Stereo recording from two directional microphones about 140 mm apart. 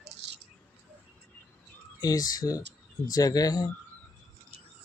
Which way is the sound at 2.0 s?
25° left (ahead or behind).